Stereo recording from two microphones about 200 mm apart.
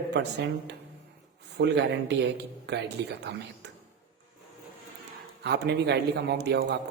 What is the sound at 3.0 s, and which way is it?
Speech, 60° right (ahead or behind).